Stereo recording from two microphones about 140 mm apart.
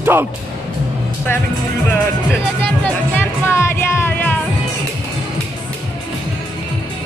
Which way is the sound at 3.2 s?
15° left (ahead or behind).